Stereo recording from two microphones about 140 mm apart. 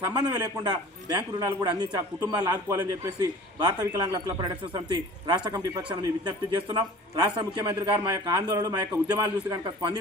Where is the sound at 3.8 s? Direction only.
25° right (ahead or behind).